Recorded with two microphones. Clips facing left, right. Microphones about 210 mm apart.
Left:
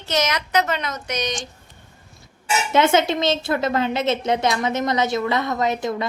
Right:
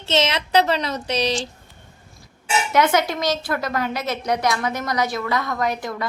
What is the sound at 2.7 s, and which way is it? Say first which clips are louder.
A woman's voice: left 2 dB; 25° left (ahead or behind).